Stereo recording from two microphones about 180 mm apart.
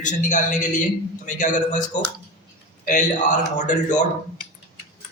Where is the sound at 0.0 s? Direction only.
45° left (ahead or behind).